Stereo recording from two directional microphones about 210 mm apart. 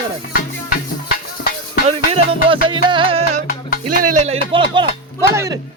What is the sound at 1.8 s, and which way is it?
Speech, 30° right (ahead or behind).